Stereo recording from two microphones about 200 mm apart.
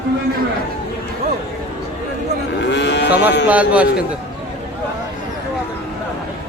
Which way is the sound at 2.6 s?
60° left (ahead or behind).